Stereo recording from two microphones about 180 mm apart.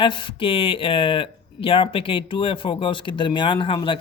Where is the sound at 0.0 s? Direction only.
25° left (ahead or behind).